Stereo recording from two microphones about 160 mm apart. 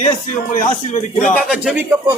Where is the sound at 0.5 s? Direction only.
50° left (ahead or behind).